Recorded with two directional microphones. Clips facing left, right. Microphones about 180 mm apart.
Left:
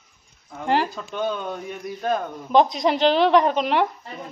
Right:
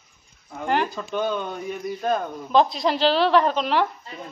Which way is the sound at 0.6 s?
30° left (ahead or behind).